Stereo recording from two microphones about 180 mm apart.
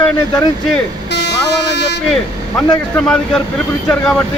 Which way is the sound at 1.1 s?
70° left (ahead or behind).